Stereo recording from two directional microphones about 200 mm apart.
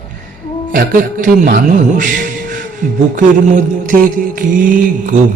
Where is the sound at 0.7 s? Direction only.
45° right (ahead or behind).